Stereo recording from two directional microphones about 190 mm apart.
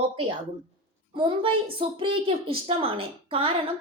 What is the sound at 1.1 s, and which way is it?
A woman's voice, 25° right (ahead or behind).